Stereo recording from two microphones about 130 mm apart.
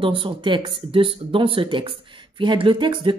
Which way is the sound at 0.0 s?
40° right (ahead or behind).